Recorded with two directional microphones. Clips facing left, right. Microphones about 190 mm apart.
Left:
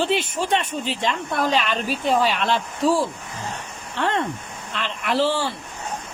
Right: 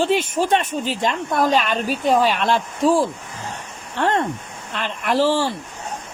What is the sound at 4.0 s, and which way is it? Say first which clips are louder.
Speech: right 3 dB; 50° right (ahead or behind).